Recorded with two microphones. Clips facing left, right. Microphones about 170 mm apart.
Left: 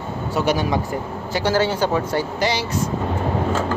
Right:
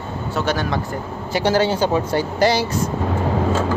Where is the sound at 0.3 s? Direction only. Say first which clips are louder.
Left 2 dB; 10° left (ahead or behind).